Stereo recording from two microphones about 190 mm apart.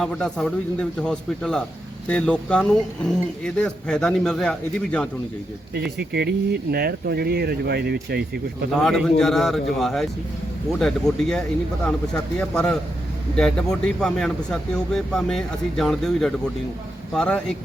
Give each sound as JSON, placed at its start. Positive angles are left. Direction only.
{"t": 0.0, "sound": "speech", "side_deg": 5}
{"t": 6.0, "sound": "speech", "side_deg": -55}
{"t": 8.8, "sound": "speech", "side_deg": 0}